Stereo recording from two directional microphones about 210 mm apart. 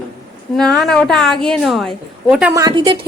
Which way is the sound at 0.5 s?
Centre (ahead or behind).